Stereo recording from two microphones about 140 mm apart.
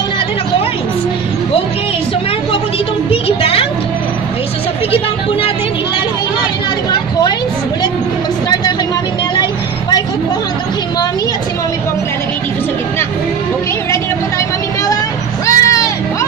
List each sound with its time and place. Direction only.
3.1 s music: 40° left (ahead or behind)
6.9 s vehicle: 30° left (ahead or behind)
9.4 s vehicle: 30° left (ahead or behind)
15.4 s vehicle: 25° left (ahead or behind)